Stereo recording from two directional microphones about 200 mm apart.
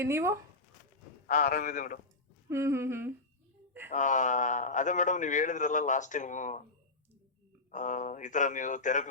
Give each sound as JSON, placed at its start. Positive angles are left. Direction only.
{"t": 0.0, "sound": "humming", "side_deg": -15}
{"t": 1.3, "sound": "a man's voice", "side_deg": 40}
{"t": 2.5, "sound": "humming", "side_deg": -15}
{"t": 3.9, "sound": "a man's voice", "side_deg": 40}
{"t": 7.7, "sound": "a man's voice", "side_deg": 40}